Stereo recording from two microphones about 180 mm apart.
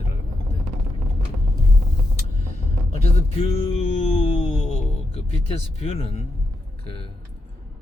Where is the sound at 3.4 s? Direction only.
35° left (ahead or behind).